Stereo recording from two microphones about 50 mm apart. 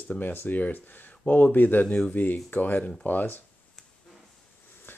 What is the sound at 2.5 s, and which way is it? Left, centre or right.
Speech, left.